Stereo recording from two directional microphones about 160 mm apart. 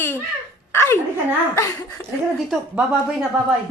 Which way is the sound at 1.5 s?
20° left (ahead or behind).